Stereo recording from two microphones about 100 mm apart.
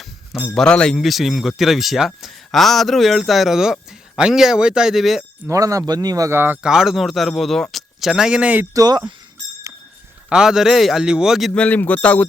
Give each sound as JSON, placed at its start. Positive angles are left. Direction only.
{"t": 0.4, "sound": "speech", "side_deg": 10}
{"t": 5.5, "sound": "speech", "side_deg": -35}
{"t": 6.3, "sound": "speech", "side_deg": -20}
{"t": 6.6, "sound": "speech", "side_deg": -5}
{"t": 8.7, "sound": "speech", "side_deg": -40}
{"t": 10.2, "sound": "speech", "side_deg": -5}
{"t": 11.5, "sound": "a man's voice", "side_deg": 15}